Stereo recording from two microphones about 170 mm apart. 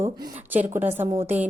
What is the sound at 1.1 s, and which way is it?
Speech, 40° right (ahead or behind).